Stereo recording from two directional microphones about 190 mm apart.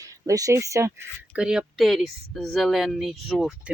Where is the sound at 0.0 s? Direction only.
15° right (ahead or behind).